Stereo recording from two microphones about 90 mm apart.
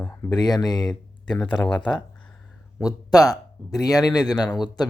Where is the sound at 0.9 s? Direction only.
10° left (ahead or behind).